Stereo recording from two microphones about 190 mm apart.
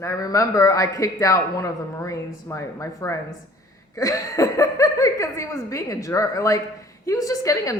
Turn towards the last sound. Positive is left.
turn(degrees=15)  # may be behind; listen again after turning